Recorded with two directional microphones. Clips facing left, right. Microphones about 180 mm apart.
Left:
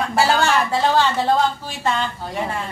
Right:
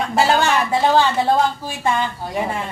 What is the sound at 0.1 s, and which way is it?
Speech, 20° right (ahead or behind).